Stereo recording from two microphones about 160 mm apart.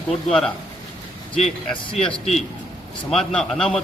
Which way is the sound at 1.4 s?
40° left (ahead or behind).